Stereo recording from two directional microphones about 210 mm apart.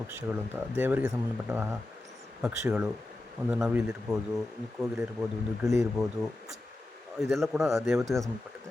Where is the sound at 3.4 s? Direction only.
10° right (ahead or behind).